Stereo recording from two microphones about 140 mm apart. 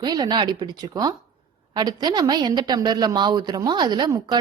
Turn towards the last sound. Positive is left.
turn(degrees=-30)  # may be behind; listen again after turning